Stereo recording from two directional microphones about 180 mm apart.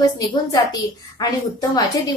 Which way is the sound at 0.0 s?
20° left (ahead or behind).